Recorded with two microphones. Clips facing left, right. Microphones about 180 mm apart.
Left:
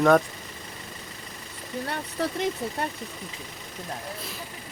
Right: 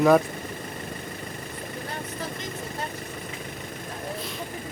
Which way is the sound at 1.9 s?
70° left (ahead or behind).